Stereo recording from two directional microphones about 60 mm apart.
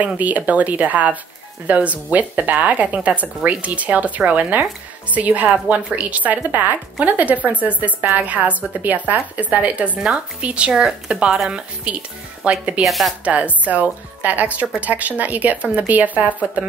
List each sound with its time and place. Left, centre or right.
0.0 s a woman's voice: right
12.8 s speech: centre
13.2 s speech: right